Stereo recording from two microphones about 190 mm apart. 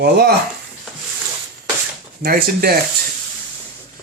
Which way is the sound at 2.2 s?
55° right (ahead or behind).